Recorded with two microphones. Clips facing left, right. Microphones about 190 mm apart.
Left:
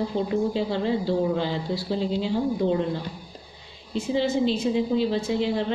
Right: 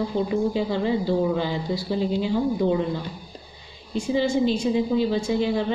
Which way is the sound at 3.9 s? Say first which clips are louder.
Right 2 dB; 5° left (ahead or behind).